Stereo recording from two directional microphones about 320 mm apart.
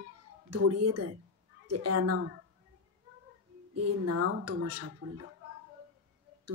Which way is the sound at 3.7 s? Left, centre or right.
Right.